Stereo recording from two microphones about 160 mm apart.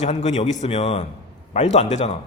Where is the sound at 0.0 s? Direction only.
45° left (ahead or behind).